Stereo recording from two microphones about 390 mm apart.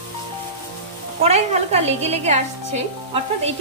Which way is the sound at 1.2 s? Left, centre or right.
Centre.